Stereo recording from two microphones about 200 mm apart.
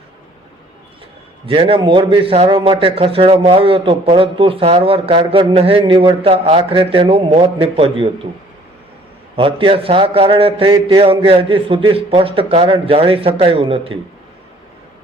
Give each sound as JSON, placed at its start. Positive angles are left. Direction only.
{"t": 1.5, "sound": "a man's voice", "side_deg": -25}
{"t": 9.3, "sound": "a man's voice", "side_deg": -25}